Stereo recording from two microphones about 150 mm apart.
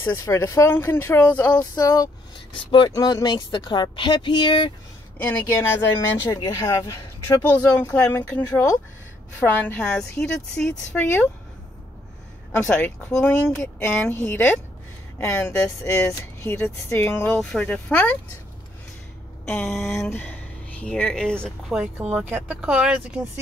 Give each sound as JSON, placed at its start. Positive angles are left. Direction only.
{"t": 0.1, "sound": "speech", "side_deg": 20}
{"t": 1.6, "sound": "a sound", "side_deg": 25}
{"t": 2.5, "sound": "speech", "side_deg": 30}
{"t": 5.2, "sound": "speech", "side_deg": 15}
{"t": 12.6, "sound": "speech", "side_deg": 10}
{"t": 19.4, "sound": "a sound", "side_deg": 15}
{"t": 19.8, "sound": "speech", "side_deg": 15}